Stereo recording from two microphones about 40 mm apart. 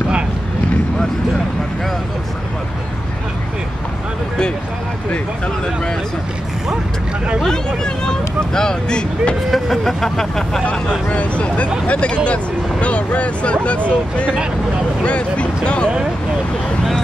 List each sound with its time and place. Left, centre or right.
7.4 s vehicle: centre
9.5 s speech: centre
10.6 s a sound: left
11.8 s speech: left
12.8 s a sound: left
13.8 s speech: left